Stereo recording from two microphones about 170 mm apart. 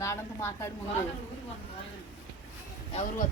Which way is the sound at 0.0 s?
15° left (ahead or behind).